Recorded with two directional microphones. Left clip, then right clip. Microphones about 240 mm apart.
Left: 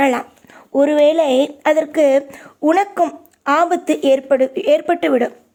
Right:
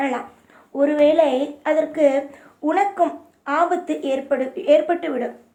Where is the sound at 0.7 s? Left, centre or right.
Left.